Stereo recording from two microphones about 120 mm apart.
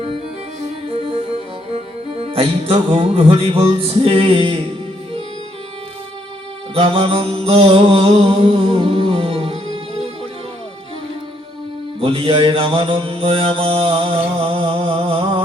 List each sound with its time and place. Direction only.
0.9 s music: 50° right (ahead or behind)
6.7 s mantra: 50° right (ahead or behind)
11.9 s mantra: 50° right (ahead or behind)